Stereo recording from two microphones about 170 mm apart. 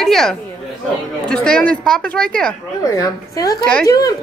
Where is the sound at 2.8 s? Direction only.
20° left (ahead or behind).